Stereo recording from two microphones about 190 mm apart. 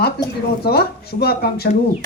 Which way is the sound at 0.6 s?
55° left (ahead or behind).